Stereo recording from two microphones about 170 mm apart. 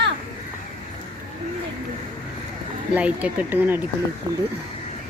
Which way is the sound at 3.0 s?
10° right (ahead or behind).